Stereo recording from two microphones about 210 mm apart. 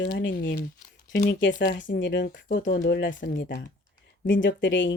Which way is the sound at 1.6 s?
60° left (ahead or behind).